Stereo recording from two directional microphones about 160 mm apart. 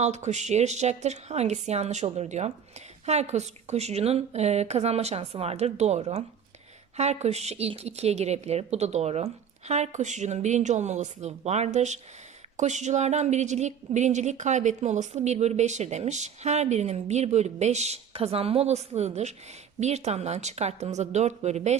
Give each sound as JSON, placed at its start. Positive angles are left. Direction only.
{"t": 0.0, "sound": "a woman's voice", "side_deg": -45}